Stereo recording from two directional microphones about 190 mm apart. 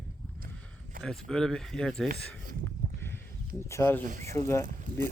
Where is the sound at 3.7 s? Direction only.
15° left (ahead or behind).